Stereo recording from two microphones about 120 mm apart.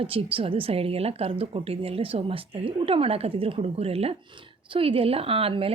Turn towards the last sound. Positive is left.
turn(degrees=-50)  # may be behind; listen again after turning